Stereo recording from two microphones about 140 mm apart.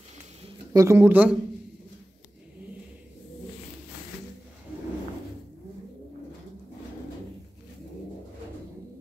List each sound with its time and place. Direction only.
0.7 s speech: 20° right (ahead or behind)